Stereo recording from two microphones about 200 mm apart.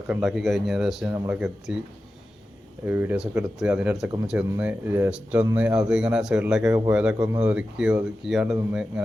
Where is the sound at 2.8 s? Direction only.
10° right (ahead or behind).